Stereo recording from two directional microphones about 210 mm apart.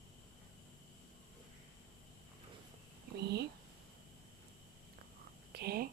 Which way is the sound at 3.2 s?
50° right (ahead or behind).